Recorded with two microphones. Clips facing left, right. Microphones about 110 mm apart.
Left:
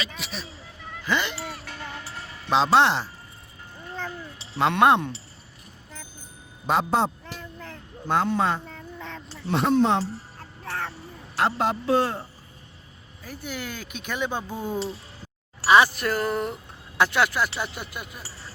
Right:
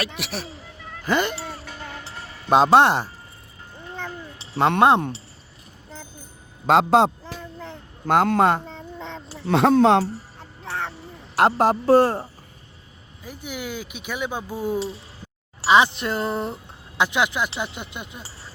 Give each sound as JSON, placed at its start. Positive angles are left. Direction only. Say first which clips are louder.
{"t": 0.2, "sound": "speech", "louder": "right 5 dB", "side_deg": -70}
{"t": 1.0, "sound": "a woman's voice", "louder": "right 4 dB", "side_deg": -45}
{"t": 2.5, "sound": "a woman's voice", "louder": "right 4 dB", "side_deg": -50}
{"t": 4.5, "sound": "a woman's voice", "louder": "right 3 dB", "side_deg": -45}
{"t": 6.7, "sound": "a man's voice", "louder": "right 7 dB", "side_deg": -90}
{"t": 8.0, "sound": "a man's voice", "louder": "right 5 dB", "side_deg": -65}
{"t": 8.6, "sound": "duck", "louder": "right 3 dB", "side_deg": -25}
{"t": 9.5, "sound": "speech", "louder": "right 5 dB", "side_deg": -85}
{"t": 10.6, "sound": "a sound", "louder": "right 2 dB", "side_deg": -15}
{"t": 11.3, "sound": "a woman's voice", "louder": "right 6 dB", "side_deg": -50}
{"t": 13.2, "sound": "speech", "louder": "right 2 dB", "side_deg": -15}
{"t": 15.6, "sound": "speech", "louder": "right 1 dB", "side_deg": -20}
{"t": 17.0, "sound": "speech", "louder": "even", "side_deg": -15}